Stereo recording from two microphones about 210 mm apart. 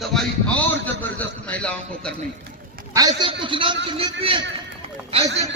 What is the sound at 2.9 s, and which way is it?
A man's voice, 20° right (ahead or behind).